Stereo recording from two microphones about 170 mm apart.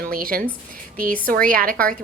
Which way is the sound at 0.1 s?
55° right (ahead or behind).